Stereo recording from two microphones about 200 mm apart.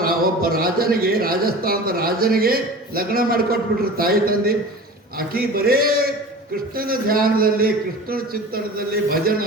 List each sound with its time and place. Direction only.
0.0 s a man's voice: 50° right (ahead or behind)